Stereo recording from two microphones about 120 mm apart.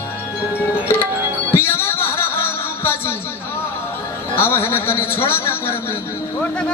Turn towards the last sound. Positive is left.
turn(degrees=20)  # may be behind; listen again after turning